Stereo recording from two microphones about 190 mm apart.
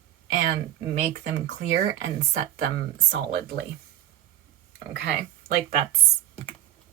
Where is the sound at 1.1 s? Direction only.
65° right (ahead or behind).